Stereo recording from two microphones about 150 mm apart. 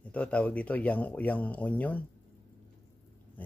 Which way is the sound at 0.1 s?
10° left (ahead or behind).